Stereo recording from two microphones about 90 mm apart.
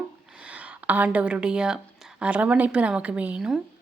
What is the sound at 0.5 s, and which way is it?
A woman's voice, 15° right (ahead or behind).